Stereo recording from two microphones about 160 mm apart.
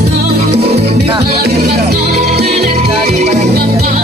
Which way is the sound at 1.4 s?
80° right.